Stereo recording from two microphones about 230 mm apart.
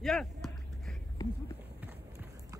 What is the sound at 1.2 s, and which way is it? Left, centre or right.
Run, centre.